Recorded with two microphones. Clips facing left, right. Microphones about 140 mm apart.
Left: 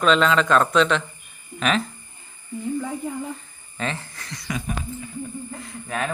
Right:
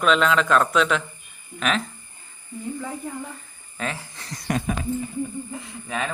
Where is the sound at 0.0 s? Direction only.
5° right (ahead or behind).